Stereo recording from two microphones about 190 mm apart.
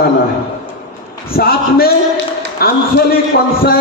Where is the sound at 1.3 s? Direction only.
55° left (ahead or behind).